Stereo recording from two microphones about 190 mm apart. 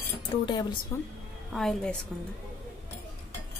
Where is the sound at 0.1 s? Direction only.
25° left (ahead or behind).